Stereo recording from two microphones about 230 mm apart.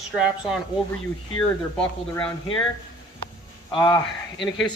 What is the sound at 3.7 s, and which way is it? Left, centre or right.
Speech, centre.